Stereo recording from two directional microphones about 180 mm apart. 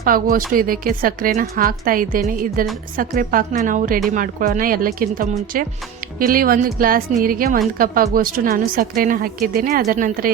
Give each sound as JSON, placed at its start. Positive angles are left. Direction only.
{"t": 0.0, "sound": "speech", "side_deg": -50}